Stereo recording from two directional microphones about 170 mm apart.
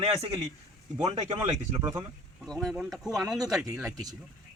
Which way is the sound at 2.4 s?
5° left (ahead or behind).